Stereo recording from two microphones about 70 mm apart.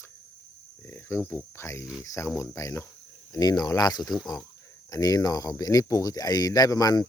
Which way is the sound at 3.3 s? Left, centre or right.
Left.